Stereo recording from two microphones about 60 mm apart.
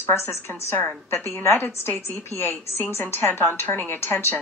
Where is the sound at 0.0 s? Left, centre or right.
Left.